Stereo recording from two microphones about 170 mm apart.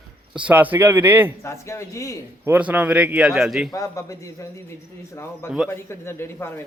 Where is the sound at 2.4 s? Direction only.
10° right (ahead or behind).